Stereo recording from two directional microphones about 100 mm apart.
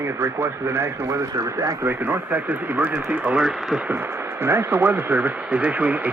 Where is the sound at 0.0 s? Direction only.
25° right (ahead or behind).